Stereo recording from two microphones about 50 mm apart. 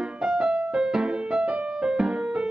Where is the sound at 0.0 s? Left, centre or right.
Centre.